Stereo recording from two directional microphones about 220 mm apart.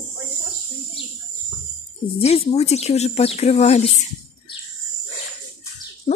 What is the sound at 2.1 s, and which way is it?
Speech, 30° left (ahead or behind).